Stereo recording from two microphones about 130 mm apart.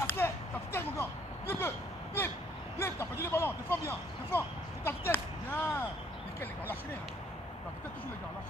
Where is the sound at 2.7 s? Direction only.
20° left (ahead or behind).